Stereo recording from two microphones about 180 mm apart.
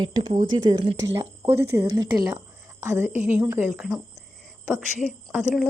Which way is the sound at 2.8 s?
15° right (ahead or behind).